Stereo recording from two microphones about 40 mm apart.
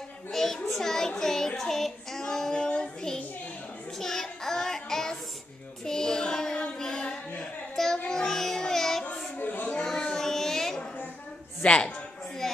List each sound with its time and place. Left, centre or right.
0.3 s child singing: centre
6.8 s music: centre
7.7 s child singing: centre
8.1 s music: centre
9.4 s a sound: left
9.8 s child singing: centre
11.6 s a woman's voice: left